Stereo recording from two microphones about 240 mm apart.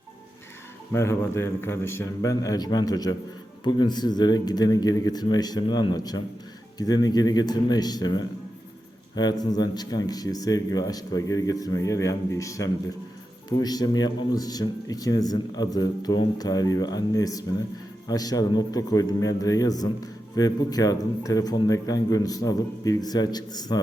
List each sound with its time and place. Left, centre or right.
0.9 s a man's voice: centre